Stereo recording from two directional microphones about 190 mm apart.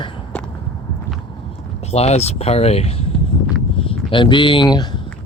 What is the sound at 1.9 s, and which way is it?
Speech, 35° left (ahead or behind).